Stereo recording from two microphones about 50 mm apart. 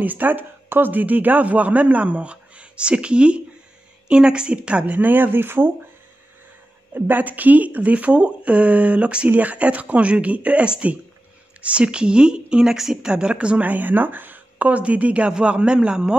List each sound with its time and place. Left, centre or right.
0.0 s speech: right
4.9 s speech: right
6.9 s speech: right
13.6 s a woman's voice: right; by 16.2 s centre